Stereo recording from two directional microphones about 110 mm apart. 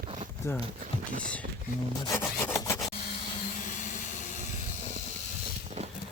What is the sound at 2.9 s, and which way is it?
Vehicle, 70° left (ahead or behind).